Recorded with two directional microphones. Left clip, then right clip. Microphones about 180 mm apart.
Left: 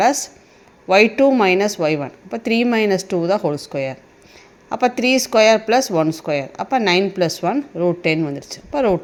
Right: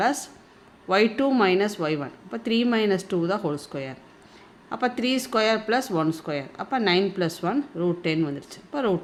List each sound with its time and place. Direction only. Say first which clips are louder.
0.0 s speech: left 8 dB; 25° left (ahead or behind)